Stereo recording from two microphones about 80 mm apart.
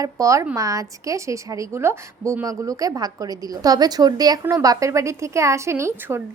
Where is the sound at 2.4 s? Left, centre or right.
Right.